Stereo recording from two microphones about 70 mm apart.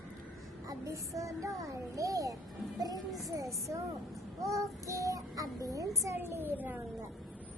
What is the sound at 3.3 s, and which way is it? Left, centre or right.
Child singing, right.